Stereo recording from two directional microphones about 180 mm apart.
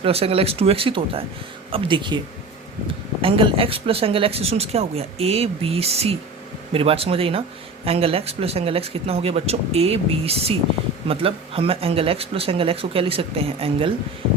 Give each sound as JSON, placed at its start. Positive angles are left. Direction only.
{"t": 0.0, "sound": "speech", "side_deg": -35}